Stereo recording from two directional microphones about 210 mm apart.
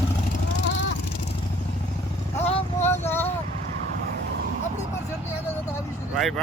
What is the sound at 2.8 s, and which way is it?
Vehicle, 10° left (ahead or behind).